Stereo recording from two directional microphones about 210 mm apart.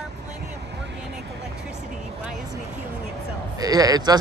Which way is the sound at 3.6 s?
20° right (ahead or behind).